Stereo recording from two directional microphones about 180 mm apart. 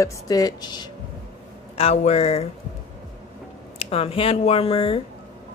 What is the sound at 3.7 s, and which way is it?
Speech, 30° left (ahead or behind).